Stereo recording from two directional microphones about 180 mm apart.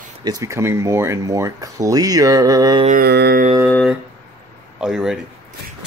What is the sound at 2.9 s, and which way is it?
Mantra, 55° right (ahead or behind).